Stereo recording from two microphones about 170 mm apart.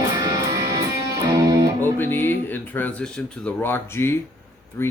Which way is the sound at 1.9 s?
10° left (ahead or behind).